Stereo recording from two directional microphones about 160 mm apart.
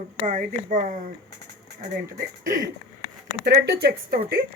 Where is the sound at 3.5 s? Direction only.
75° right (ahead or behind).